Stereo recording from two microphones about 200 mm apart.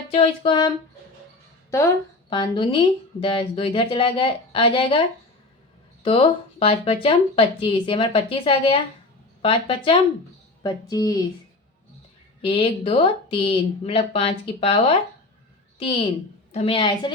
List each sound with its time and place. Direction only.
0.1 s speech: 30° left (ahead or behind)
2.3 s speech: 25° left (ahead or behind)
12.4 s speech: 30° left (ahead or behind)